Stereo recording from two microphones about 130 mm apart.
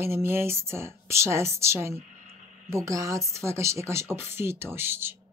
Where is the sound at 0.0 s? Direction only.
20° right (ahead or behind).